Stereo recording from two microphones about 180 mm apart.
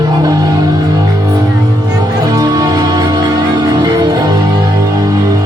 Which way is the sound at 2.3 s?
20° right (ahead or behind).